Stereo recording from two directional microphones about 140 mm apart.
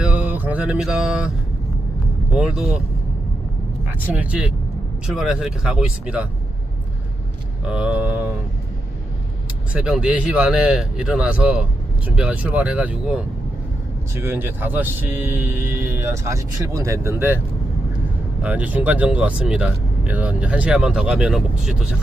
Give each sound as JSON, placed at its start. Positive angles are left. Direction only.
{"t": 0.0, "sound": "mantra", "side_deg": -10}
{"t": 2.3, "sound": "speech", "side_deg": -5}
{"t": 4.0, "sound": "speech", "side_deg": -10}
{"t": 7.6, "sound": "speech", "side_deg": -5}
{"t": 9.7, "sound": "speech", "side_deg": -5}
{"t": 14.2, "sound": "speech", "side_deg": -15}
{"t": 18.4, "sound": "speech", "side_deg": -10}